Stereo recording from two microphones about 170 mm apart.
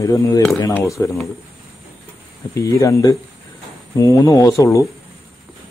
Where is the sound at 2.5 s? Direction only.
20° left (ahead or behind).